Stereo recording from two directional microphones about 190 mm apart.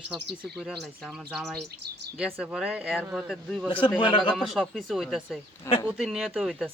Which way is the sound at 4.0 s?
25° left (ahead or behind).